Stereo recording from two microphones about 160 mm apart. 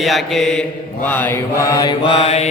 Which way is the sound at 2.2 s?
40° left (ahead or behind).